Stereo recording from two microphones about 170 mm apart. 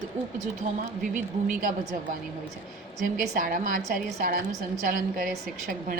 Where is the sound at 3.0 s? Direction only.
50° right (ahead or behind).